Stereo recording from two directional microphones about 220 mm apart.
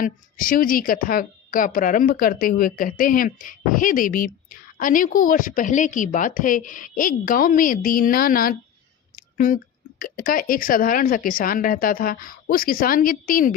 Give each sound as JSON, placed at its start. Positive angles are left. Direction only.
{"t": 0.0, "sound": "a woman's voice", "side_deg": 40}
{"t": 9.1, "sound": "a sound", "side_deg": 35}
{"t": 10.0, "sound": "a woman's voice", "side_deg": 40}